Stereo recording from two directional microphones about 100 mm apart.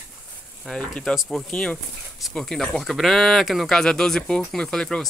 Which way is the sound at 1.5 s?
10° left (ahead or behind).